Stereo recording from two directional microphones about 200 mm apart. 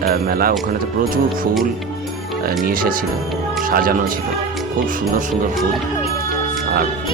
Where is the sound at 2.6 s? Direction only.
45° right (ahead or behind).